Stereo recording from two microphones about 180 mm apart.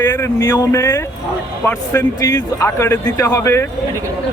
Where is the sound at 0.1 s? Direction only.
20° left (ahead or behind).